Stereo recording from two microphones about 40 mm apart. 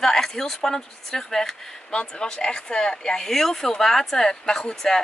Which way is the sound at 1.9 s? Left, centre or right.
Left.